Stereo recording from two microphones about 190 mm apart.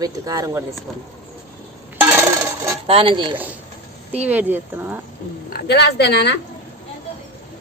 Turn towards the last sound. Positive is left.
turn(degrees=60)  # may be behind; listen again after turning